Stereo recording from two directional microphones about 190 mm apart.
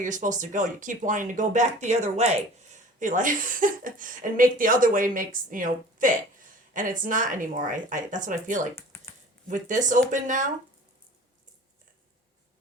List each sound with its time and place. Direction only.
0.0 s speech: 40° right (ahead or behind)
8.9 s a sound: 10° left (ahead or behind)
9.5 s speech: 40° right (ahead or behind)